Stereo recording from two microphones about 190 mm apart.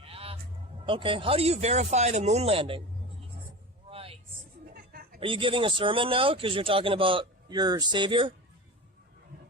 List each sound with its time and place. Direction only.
0.0 s honk: 30° right (ahead or behind)
0.9 s speech: 25° right (ahead or behind)
3.8 s vehicle: 30° right (ahead or behind)
4.7 s a sound: 50° right (ahead or behind)
5.2 s speech: 25° right (ahead or behind)